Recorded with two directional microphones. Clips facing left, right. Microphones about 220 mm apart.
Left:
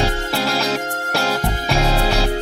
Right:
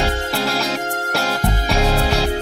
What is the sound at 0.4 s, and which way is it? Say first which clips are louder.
Music: left 3 dB; centre (ahead or behind).